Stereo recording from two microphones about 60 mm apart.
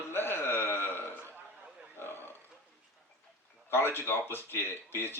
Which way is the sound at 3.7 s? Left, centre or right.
Left.